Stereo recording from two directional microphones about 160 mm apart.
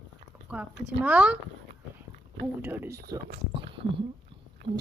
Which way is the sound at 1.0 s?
10° right (ahead or behind).